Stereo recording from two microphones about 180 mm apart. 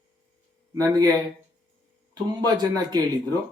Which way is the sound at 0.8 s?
20° right (ahead or behind).